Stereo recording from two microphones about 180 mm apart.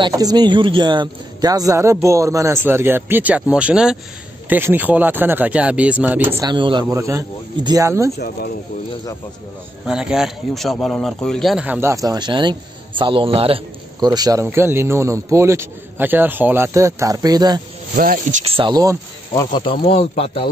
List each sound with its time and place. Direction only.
0.0 s speech: 25° right (ahead or behind)
6.5 s speech: 25° right (ahead or behind)
9.8 s speech: 5° right (ahead or behind); by 17.6 s 20° right (ahead or behind)
17.9 s speech: 50° right (ahead or behind)
18.4 s speech: 25° right (ahead or behind)
19.3 s speech: 25° left (ahead or behind)